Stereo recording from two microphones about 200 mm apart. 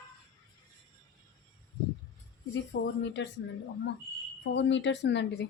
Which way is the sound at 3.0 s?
60° left (ahead or behind).